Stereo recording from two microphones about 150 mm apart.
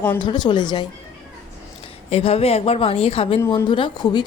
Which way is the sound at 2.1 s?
40° left (ahead or behind).